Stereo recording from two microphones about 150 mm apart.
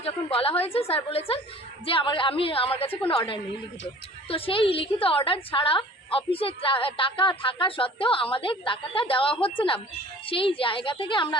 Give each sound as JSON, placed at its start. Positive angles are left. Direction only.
{"t": 0.0, "sound": "a woman's voice", "side_deg": 40}